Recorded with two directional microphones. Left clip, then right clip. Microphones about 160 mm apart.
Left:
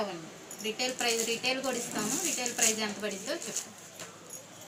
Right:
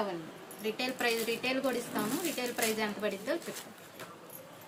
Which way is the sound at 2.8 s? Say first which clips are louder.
Right 1 dB; 15° right (ahead or behind).